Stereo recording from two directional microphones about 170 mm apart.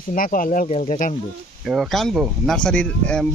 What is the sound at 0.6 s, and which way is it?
Speech, 40° left (ahead or behind).